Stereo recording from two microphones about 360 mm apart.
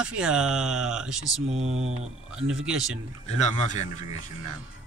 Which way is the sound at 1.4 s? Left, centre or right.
Centre.